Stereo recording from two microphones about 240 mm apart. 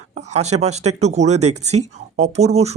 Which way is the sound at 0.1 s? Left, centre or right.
Right.